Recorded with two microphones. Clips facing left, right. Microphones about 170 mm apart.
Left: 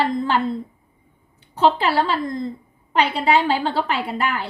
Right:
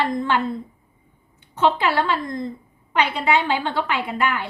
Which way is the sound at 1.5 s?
35° left (ahead or behind).